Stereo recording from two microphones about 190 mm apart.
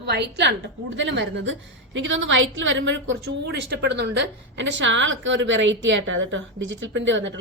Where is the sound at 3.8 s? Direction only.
65° right (ahead or behind).